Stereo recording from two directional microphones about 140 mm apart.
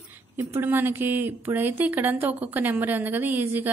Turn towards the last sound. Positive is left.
turn(degrees=-15)  # may be behind; listen again after turning